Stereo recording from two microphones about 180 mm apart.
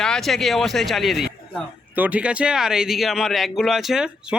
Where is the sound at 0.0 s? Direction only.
Centre (ahead or behind).